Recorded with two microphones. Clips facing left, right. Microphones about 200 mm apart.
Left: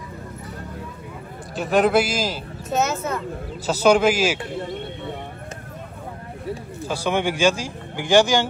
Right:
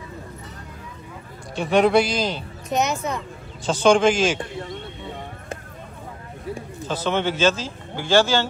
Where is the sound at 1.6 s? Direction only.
Centre (ahead or behind).